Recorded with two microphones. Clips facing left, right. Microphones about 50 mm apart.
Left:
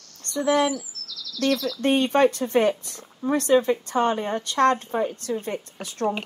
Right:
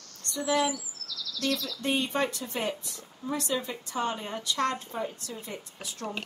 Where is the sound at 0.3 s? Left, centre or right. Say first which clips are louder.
Left 6 dB; left.